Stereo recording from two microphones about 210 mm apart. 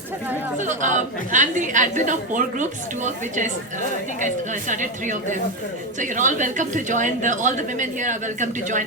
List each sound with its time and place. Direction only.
0.6 s a woman's voice: 35° right (ahead or behind)
4.7 s a woman's voice: 35° right (ahead or behind)